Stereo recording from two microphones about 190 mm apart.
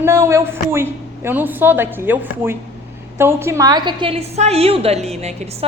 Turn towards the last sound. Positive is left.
turn(degrees=-35)  # may be behind; listen again after turning